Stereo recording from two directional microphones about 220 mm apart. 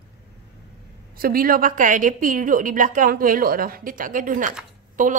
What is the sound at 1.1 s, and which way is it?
A woman's voice, 40° right (ahead or behind).